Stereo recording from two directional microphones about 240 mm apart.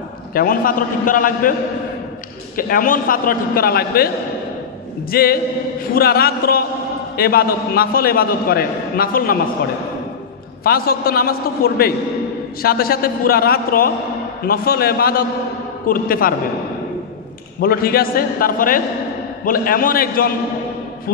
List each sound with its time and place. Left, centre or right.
0.3 s a man's voice: left
2.5 s a man's voice: left
5.1 s a man's voice: left
10.6 s a man's voice: left
17.6 s a man's voice: left